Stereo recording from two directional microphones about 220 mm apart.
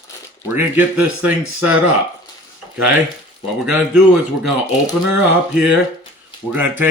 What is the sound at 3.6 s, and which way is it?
Speech, 5° right (ahead or behind).